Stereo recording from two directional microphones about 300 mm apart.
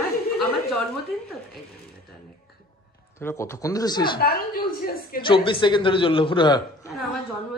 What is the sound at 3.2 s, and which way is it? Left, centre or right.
Speech, centre.